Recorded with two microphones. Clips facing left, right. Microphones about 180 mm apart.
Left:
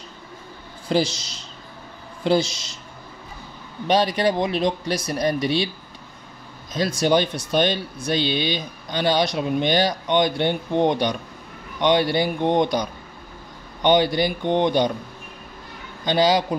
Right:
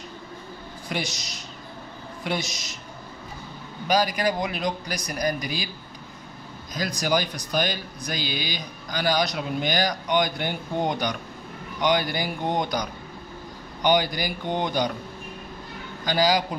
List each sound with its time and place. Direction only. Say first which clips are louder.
0.8 s speech: left 10 dB; 30° left (ahead or behind)
3.8 s speech: left 4 dB; 30° left (ahead or behind)
6.7 s speech: left 6 dB; 25° left (ahead or behind)
16.1 s speech: left 4 dB; 25° left (ahead or behind)